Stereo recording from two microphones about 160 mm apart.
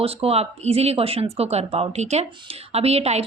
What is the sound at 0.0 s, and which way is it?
A woman's voice, 35° right (ahead or behind).